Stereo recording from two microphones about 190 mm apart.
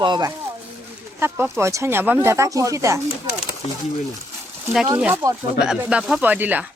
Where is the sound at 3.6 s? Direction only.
35° left (ahead or behind).